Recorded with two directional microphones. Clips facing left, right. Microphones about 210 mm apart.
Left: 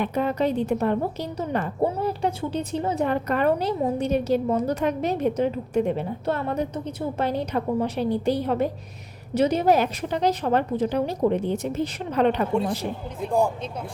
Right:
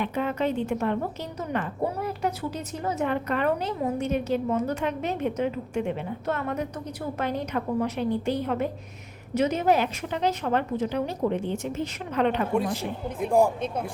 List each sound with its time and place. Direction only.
0.0 s a woman's voice: 40° left (ahead or behind)